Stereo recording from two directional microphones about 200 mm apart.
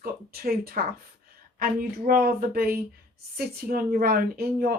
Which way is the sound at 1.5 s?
45° right (ahead or behind).